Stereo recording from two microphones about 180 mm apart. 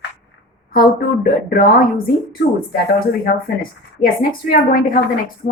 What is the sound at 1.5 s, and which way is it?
A woman's voice, 55° left (ahead or behind).